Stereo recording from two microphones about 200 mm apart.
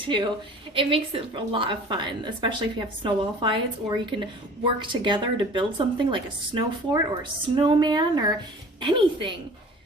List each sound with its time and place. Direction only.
0.0 s a woman's voice: 25° right (ahead or behind)